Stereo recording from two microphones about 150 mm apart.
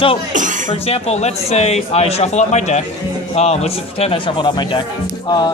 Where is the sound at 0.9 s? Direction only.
45° left (ahead or behind).